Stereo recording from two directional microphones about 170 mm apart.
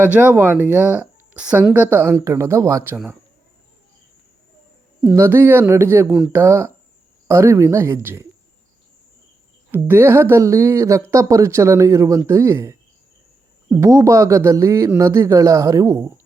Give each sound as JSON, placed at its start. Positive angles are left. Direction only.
{"t": 0.0, "sound": "speech", "side_deg": -10}
{"t": 5.1, "sound": "speech", "side_deg": -15}
{"t": 9.7, "sound": "speech", "side_deg": -15}